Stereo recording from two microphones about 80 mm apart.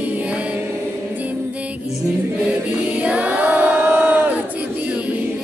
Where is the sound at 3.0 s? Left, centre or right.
Centre.